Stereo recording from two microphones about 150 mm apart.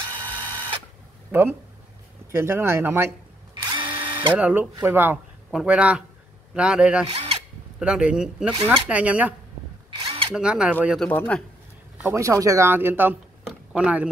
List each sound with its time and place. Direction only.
0.2 s a sound: 30° right (ahead or behind)
1.3 s speech: 15° right (ahead or behind)
3.7 s drill: 35° right (ahead or behind)
4.4 s speech: 10° right (ahead or behind)
7.1 s speech: 40° right (ahead or behind)
7.8 s speech: 5° right (ahead or behind)
9.8 s drill: 40° right (ahead or behind)
10.3 s speech: 5° right (ahead or behind)
11.0 s a man's voice: 10° left (ahead or behind)
12.0 s speech: 15° right (ahead or behind)
13.5 s a sound: 10° right (ahead or behind)